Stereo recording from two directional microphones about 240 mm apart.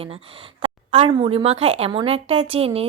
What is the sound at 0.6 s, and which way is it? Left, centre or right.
A woman's voice, right.